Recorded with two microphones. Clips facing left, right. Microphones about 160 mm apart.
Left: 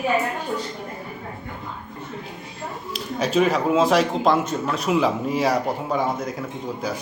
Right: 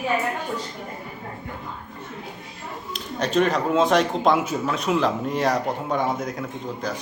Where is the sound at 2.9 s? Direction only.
5° left (ahead or behind).